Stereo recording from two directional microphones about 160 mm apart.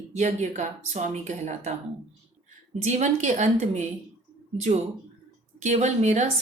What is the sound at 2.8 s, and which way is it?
A woman's voice, 45° right (ahead or behind).